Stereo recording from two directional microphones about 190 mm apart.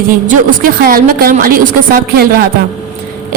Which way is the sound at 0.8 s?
50° right (ahead or behind).